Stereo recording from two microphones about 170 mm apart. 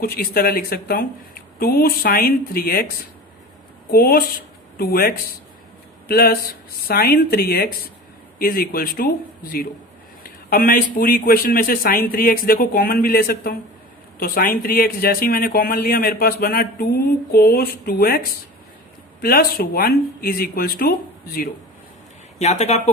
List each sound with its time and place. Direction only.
0.0 s speech: 60° left (ahead or behind)
3.9 s speech: 60° left (ahead or behind)
22.4 s speech: 40° left (ahead or behind)